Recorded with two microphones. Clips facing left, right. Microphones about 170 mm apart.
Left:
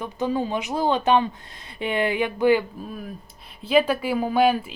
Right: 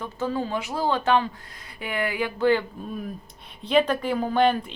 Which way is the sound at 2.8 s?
Centre (ahead or behind).